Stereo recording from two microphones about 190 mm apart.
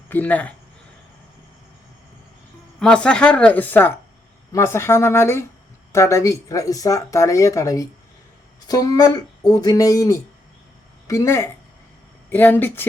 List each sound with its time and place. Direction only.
0.1 s speech: 10° left (ahead or behind)
2.8 s speech: 5° left (ahead or behind)